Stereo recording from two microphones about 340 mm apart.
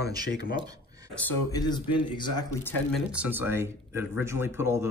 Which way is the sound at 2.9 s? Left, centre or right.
Centre.